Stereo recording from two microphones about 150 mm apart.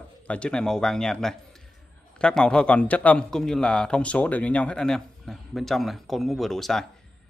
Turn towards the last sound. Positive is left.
turn(degrees=0)  # may be behind; listen again after turning